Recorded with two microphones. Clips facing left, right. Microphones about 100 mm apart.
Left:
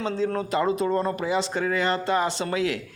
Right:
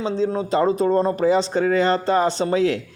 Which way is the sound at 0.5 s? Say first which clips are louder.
Right 6 dB; 35° right (ahead or behind).